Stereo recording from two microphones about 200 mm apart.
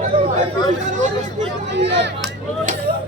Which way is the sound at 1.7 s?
60° right (ahead or behind).